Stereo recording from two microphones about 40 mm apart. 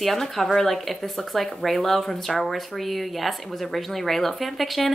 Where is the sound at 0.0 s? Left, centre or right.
Centre.